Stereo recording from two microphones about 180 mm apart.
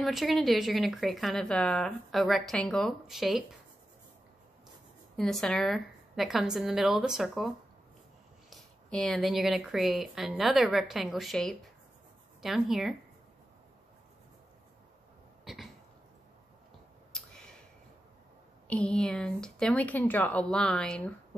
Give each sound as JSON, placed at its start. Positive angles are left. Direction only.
{"t": 0.0, "sound": "a woman's voice", "side_deg": 0}
{"t": 5.1, "sound": "a woman's voice", "side_deg": 0}
{"t": 15.4, "sound": "cough", "side_deg": 0}
{"t": 17.1, "sound": "a sound", "side_deg": 5}
{"t": 18.7, "sound": "a woman's voice", "side_deg": 5}